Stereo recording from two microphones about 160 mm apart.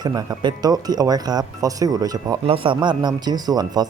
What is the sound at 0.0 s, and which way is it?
Speech, 25° right (ahead or behind).